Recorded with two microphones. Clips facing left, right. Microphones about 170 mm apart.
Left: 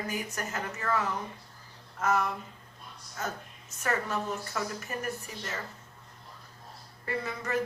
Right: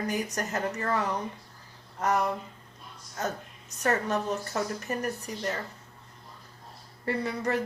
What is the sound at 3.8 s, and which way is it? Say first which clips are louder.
A woman's voice: right 4 dB; 40° right (ahead or behind).